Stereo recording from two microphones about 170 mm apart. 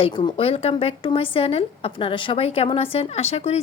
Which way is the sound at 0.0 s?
30° left (ahead or behind).